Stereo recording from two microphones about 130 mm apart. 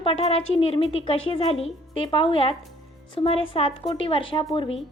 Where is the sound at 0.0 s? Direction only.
50° left (ahead or behind).